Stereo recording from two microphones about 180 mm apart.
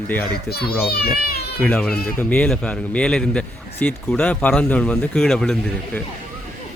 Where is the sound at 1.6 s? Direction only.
5° left (ahead or behind).